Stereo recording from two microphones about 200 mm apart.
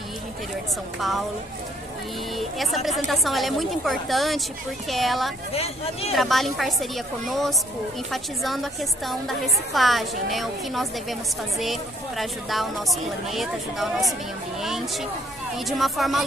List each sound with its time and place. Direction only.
0.9 s a woman's voice: centre (ahead or behind)
2.3 s a woman's voice: centre (ahead or behind)
5.5 s speech: 30° left (ahead or behind)
6.1 s a woman's voice: centre (ahead or behind)